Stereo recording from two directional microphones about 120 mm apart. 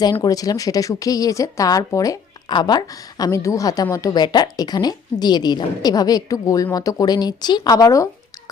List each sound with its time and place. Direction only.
0.0 s a woman's voice: 35° left (ahead or behind)